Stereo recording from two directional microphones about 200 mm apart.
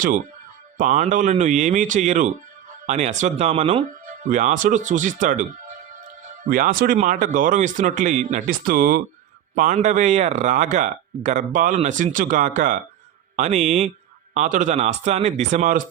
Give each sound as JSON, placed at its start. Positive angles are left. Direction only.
{"t": 0.8, "sound": "a man's voice", "side_deg": -40}
{"t": 6.5, "sound": "a man's voice", "side_deg": -45}